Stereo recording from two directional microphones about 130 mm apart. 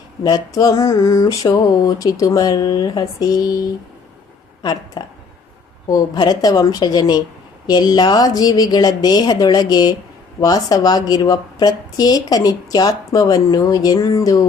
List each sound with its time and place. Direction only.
0.2 s a woman's voice: 30° left (ahead or behind)
4.6 s a woman's voice: 35° left (ahead or behind)